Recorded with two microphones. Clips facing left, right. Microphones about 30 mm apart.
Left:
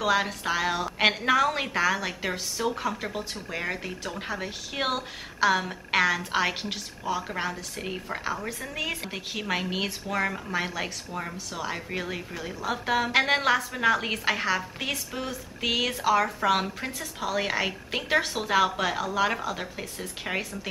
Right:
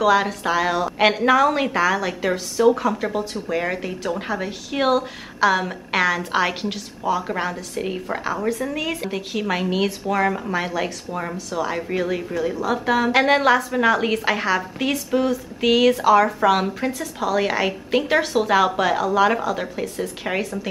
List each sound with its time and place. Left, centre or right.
0.0 s a woman's voice: centre